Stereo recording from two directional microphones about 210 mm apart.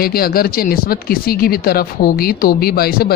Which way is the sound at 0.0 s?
45° left (ahead or behind).